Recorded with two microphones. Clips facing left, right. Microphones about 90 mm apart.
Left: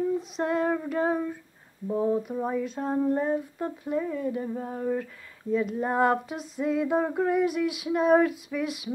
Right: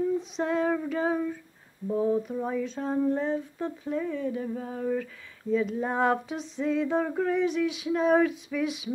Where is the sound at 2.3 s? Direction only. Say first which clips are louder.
Left 1 dB; 10° left (ahead or behind).